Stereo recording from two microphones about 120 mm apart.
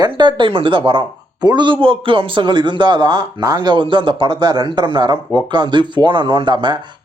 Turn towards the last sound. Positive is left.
turn(degrees=-40)  # may be behind; listen again after turning